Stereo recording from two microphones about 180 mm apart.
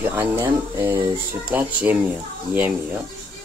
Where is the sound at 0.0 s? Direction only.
10° right (ahead or behind).